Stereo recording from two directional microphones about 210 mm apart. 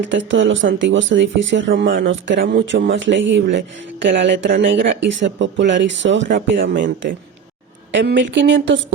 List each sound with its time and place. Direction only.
0.0 s speech: 60° right (ahead or behind)
7.9 s speech: 60° right (ahead or behind)